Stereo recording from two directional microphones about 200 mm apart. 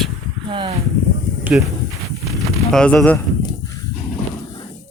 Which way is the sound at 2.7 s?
5° left (ahead or behind).